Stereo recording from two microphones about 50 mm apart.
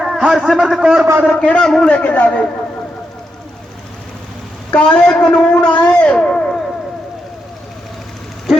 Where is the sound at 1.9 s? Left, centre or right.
Left.